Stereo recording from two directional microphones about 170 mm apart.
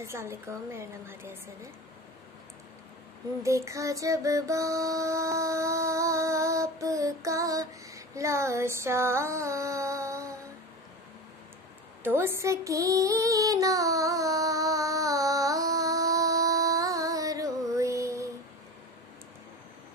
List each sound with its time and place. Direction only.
0.0 s a woman's voice: 15° right (ahead or behind)
3.4 s music: 15° right (ahead or behind)
12.0 s female singing: 15° right (ahead or behind)